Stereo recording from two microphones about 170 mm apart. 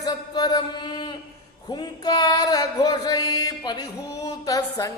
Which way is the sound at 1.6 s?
25° left (ahead or behind).